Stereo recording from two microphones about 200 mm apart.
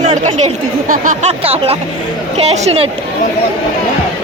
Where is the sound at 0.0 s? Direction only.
35° right (ahead or behind).